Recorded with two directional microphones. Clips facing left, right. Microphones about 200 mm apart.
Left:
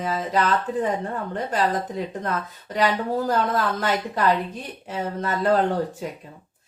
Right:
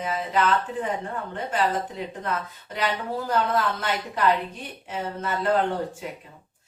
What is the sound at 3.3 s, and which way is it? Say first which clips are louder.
Speech: right 2 dB; 40° left (ahead or behind).